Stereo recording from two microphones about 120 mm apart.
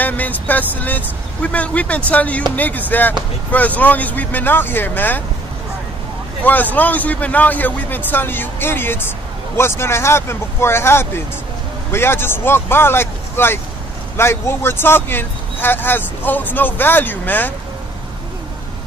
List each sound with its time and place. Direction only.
0.0 s speech: 15° left (ahead or behind)
6.4 s speech: 15° left (ahead or behind)